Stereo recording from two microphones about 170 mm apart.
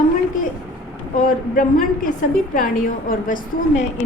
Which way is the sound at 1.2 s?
55° left (ahead or behind).